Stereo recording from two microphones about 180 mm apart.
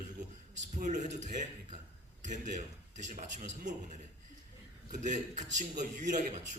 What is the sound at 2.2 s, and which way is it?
A man's voice, 40° right (ahead or behind).